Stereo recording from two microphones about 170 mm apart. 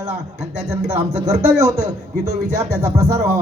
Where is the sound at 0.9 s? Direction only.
15° right (ahead or behind).